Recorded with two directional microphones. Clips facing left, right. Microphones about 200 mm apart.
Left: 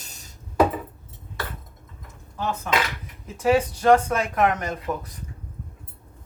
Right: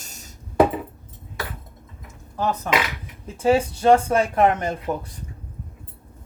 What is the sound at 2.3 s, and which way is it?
Speech, 40° right (ahead or behind).